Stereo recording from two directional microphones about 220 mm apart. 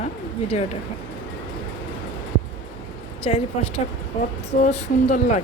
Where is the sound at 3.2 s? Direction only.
25° left (ahead or behind).